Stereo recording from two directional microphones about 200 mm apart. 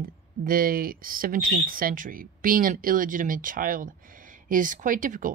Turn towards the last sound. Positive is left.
turn(degrees=-40)  # may be behind; listen again after turning